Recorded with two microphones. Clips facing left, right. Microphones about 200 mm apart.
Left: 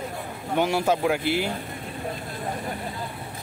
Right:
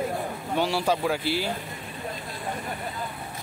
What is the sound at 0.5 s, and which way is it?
Speech, 20° left (ahead or behind).